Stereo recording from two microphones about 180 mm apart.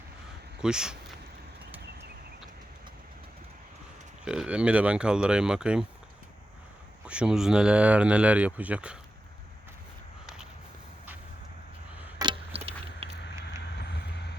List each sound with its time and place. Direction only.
0.6 s speech: 5° right (ahead or behind)
4.3 s speech: 5° right (ahead or behind)
7.0 s speech: 5° right (ahead or behind)
12.2 s a sound: 30° right (ahead or behind)
13.6 s vehicle: 70° left (ahead or behind)